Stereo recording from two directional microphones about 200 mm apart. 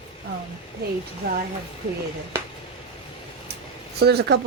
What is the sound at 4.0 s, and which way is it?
Speech, 55° right (ahead or behind).